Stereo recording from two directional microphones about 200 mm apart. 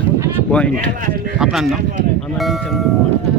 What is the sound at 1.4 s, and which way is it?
Speech, centre (ahead or behind).